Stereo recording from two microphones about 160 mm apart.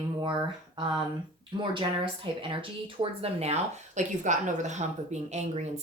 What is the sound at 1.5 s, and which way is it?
Speech, 30° right (ahead or behind).